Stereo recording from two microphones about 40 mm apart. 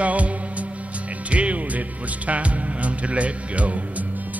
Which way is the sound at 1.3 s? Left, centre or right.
Right.